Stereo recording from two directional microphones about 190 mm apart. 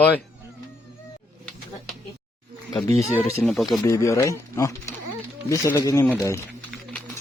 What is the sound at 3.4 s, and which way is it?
Speech, centre (ahead or behind).